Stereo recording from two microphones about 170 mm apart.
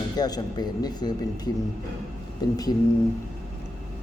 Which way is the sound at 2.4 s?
25° left (ahead or behind).